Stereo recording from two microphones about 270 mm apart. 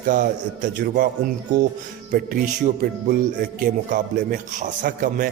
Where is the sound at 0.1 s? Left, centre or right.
Right.